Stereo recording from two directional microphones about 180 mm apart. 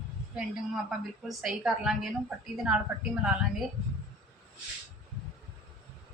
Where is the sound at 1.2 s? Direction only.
Centre (ahead or behind).